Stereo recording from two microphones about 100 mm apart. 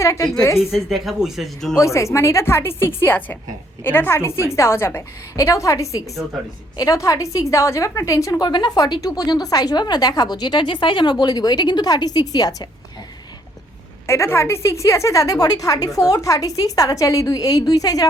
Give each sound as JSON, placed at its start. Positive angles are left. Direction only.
{"t": 0.0, "sound": "a woman's voice", "side_deg": 30}
{"t": 0.9, "sound": "speech", "side_deg": 0}
{"t": 1.7, "sound": "a woman's voice", "side_deg": 30}
{"t": 14.1, "sound": "a woman's voice", "side_deg": 25}